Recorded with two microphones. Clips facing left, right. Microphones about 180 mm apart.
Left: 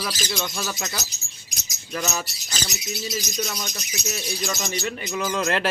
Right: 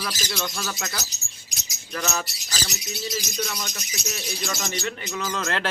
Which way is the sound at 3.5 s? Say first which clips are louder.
Left 1 dB; 15° left (ahead or behind).